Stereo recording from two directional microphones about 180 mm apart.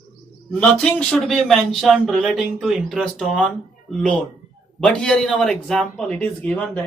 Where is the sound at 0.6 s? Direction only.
5° left (ahead or behind).